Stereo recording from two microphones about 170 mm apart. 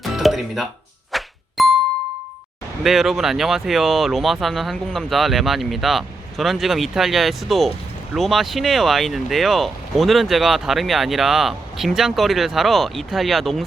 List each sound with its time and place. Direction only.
0.0 s music: centre (ahead or behind)
2.8 s speech: centre (ahead or behind)